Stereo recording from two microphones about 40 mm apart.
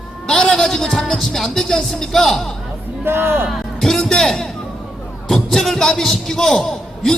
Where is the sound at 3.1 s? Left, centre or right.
Right.